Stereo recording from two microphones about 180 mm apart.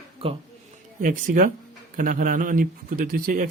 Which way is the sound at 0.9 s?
50° right (ahead or behind).